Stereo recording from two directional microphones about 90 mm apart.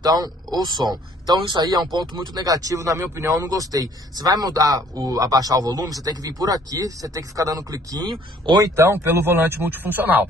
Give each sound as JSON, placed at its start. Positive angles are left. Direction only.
{"t": 0.0, "sound": "speech", "side_deg": -45}
{"t": 8.7, "sound": "speech", "side_deg": -30}